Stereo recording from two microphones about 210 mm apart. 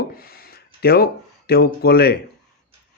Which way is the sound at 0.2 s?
45° left (ahead or behind).